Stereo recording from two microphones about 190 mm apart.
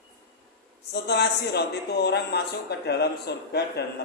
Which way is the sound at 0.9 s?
60° left (ahead or behind).